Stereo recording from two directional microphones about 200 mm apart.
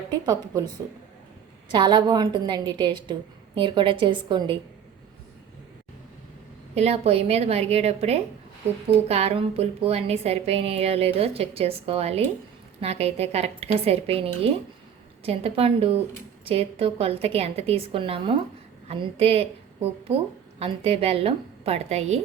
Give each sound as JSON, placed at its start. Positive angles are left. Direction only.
{"t": 0.3, "sound": "a woman's voice", "side_deg": -20}
{"t": 1.7, "sound": "a woman's voice", "side_deg": -20}
{"t": 6.7, "sound": "a woman's voice", "side_deg": -30}